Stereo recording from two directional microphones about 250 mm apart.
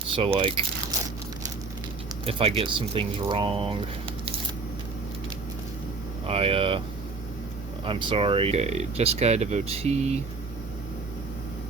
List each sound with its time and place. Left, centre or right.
0.2 s speech: right
2.2 s speech: right
6.2 s speech: right
7.9 s speech: right